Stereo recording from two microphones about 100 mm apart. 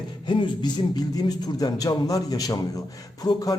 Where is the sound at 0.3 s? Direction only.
50° left (ahead or behind).